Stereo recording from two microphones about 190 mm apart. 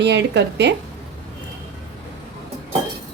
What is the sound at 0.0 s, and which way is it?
Speech, 65° right (ahead or behind).